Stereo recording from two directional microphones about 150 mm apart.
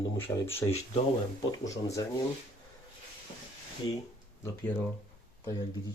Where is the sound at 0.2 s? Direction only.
15° left (ahead or behind).